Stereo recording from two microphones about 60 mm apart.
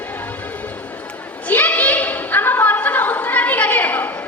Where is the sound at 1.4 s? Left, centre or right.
Left.